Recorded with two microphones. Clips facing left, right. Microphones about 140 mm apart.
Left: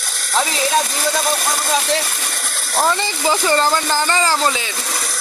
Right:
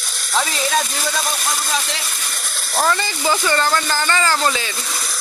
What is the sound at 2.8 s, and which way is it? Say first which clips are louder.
Speech: left 1 dB; 20° left (ahead or behind).